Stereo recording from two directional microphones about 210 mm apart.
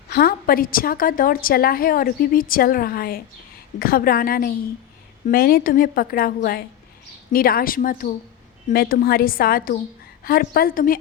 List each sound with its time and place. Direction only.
0.1 s a woman's voice: 45° left (ahead or behind)